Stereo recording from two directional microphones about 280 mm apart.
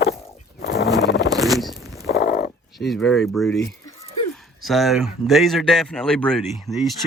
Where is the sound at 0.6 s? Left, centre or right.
Left.